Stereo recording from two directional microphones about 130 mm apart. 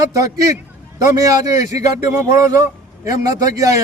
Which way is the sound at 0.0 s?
25° right (ahead or behind).